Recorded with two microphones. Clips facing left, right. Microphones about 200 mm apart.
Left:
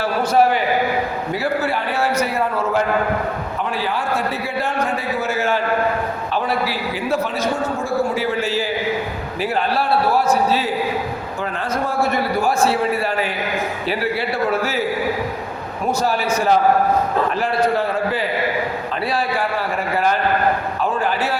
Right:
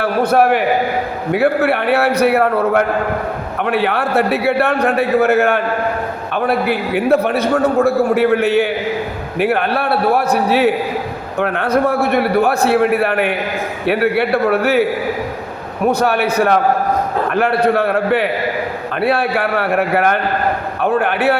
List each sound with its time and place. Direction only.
0.0 s a man's voice: 60° right (ahead or behind)